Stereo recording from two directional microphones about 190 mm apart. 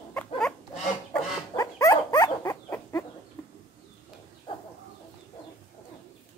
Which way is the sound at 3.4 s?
15° left (ahead or behind).